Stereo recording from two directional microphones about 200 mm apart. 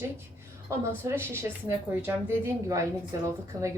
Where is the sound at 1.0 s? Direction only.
10° right (ahead or behind).